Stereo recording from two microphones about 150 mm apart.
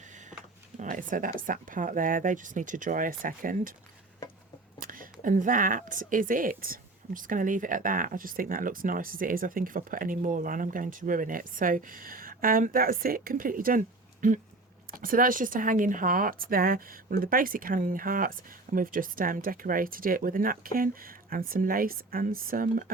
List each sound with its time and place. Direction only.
0.8 s speech: 65° right (ahead or behind)
5.2 s speech: 60° right (ahead or behind)